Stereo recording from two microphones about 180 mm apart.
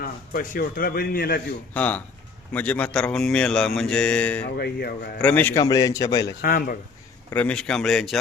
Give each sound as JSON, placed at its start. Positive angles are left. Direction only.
{"t": 0.0, "sound": "a man's voice", "side_deg": 50}
{"t": 1.7, "sound": "a man's voice", "side_deg": 10}
{"t": 4.5, "sound": "a man's voice", "side_deg": 60}
{"t": 5.2, "sound": "a man's voice", "side_deg": 10}
{"t": 6.4, "sound": "a man's voice", "side_deg": 55}
{"t": 7.3, "sound": "a man's voice", "side_deg": 5}